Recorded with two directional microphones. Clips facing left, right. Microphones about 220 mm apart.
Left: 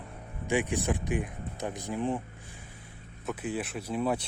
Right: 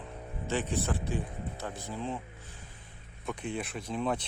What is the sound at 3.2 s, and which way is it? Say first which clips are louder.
Speech: left 2 dB; 5° left (ahead or behind).